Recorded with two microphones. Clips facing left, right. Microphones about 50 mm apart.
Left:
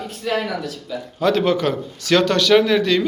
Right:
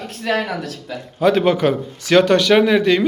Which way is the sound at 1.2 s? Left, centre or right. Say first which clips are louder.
Right 3 dB; centre.